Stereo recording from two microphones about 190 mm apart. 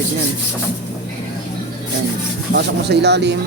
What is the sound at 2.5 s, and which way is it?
Speech, 60° right (ahead or behind).